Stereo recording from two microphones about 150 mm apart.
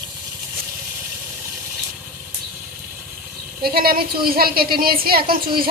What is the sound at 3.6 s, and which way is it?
A woman's voice, 90° right.